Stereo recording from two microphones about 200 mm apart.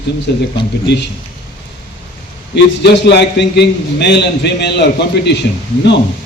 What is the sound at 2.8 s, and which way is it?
A man's voice, 60° left (ahead or behind).